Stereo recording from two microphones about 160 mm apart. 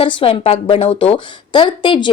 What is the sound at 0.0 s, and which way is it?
A woman's voice, 35° left (ahead or behind).